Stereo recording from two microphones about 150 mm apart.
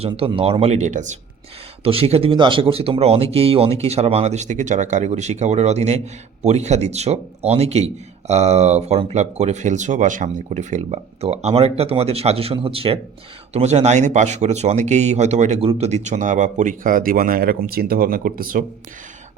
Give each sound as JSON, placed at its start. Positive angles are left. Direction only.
{"t": 0.0, "sound": "speech", "side_deg": -40}
{"t": 1.8, "sound": "speech", "side_deg": -40}